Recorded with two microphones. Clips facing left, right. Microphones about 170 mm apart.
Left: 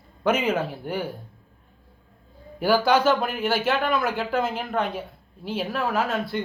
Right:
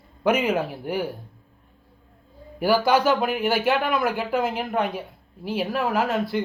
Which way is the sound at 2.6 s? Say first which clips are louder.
Even; 5° right (ahead or behind).